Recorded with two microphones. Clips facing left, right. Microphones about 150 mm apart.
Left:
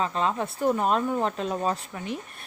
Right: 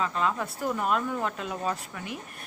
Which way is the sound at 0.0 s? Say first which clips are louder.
Left 2 dB; 25° left (ahead or behind).